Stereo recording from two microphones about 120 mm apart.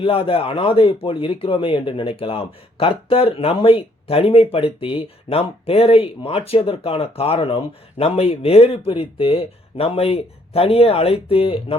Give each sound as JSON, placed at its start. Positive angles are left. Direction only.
{"t": 0.0, "sound": "speech", "side_deg": 50}